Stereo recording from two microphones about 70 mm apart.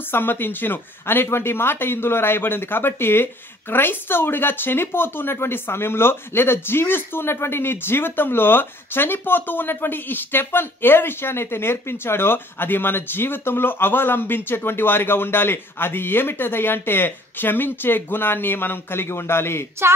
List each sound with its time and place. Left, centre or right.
0.1 s speech: left